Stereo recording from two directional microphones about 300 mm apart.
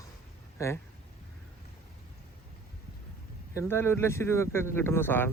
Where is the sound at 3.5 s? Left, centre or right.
Centre.